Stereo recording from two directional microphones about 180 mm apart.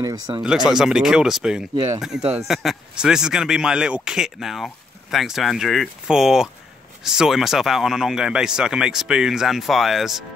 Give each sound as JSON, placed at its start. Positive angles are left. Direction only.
{"t": 0.0, "sound": "speech", "side_deg": -20}
{"t": 0.7, "sound": "speech", "side_deg": -5}